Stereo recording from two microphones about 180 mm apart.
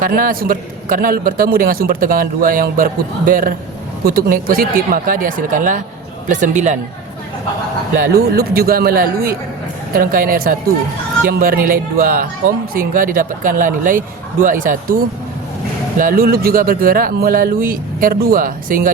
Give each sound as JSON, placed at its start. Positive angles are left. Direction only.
{"t": 0.0, "sound": "a man's voice", "side_deg": -50}
{"t": 8.4, "sound": "a man's voice", "side_deg": -55}
{"t": 16.0, "sound": "a man's voice", "side_deg": -50}